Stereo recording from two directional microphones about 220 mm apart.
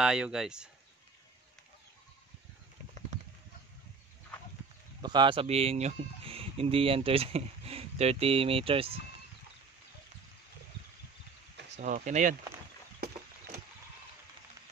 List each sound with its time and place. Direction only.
0.0 s speech: 5° right (ahead or behind)
5.0 s speech: 20° right (ahead or behind)
11.8 s speech: 35° right (ahead or behind)